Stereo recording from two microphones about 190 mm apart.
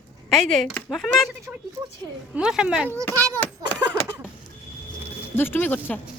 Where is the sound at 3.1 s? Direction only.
15° right (ahead or behind).